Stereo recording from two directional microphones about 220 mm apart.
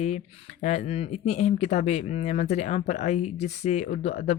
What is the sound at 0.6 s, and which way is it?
Speech, 30° left (ahead or behind).